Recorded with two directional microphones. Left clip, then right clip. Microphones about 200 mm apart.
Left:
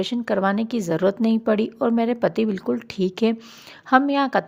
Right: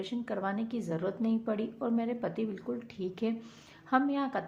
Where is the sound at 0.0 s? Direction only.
50° left (ahead or behind).